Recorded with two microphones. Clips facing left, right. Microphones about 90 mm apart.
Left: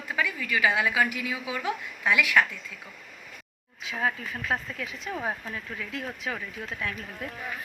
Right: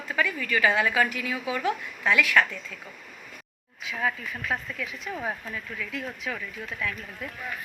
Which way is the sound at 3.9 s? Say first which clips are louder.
Even; 30° left (ahead or behind).